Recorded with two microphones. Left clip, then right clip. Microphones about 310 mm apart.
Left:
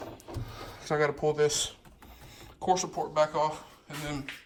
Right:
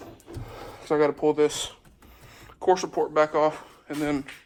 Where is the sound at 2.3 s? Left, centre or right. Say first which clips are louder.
Right 5 dB; left.